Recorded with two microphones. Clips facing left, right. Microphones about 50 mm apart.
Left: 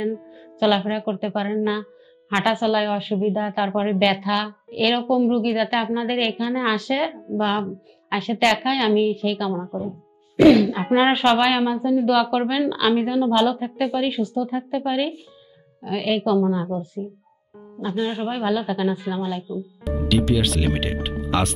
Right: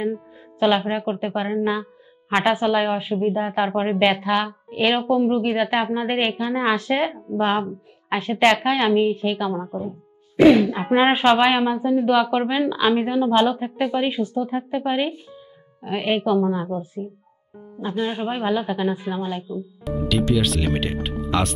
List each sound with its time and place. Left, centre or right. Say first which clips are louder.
0.0 s a woman's voice: even; right
9.6 s speech: even; centre
10.3 s a woman's voice: even; right
19.5 s speech: even; centre